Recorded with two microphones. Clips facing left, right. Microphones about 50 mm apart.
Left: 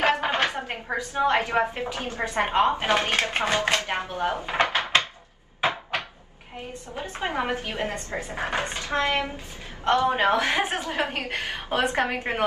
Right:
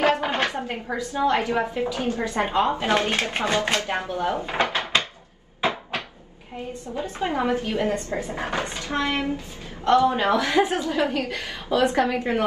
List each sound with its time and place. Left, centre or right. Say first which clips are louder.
0.0 s a sound: right 1 dB; left
0.9 s a woman's voice: even; left
4.5 s dishes: even; left
5.6 s cupboard open or close: even; left
6.7 s a woman's voice: right 4 dB; left